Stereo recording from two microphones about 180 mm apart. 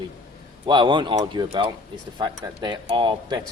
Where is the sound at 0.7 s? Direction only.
25° right (ahead or behind).